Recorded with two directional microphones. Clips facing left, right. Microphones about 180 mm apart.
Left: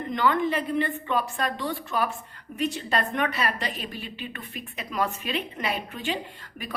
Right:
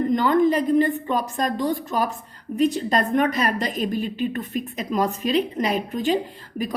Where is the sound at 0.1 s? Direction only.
40° right (ahead or behind).